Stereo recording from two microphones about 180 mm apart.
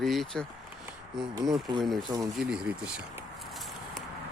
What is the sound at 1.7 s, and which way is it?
Speech, 25° right (ahead or behind).